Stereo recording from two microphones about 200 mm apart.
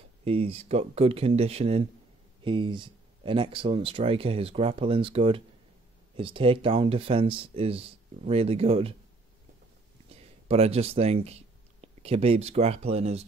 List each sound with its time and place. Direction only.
0.2 s speech: 30° right (ahead or behind)
10.0 s speech: 30° right (ahead or behind)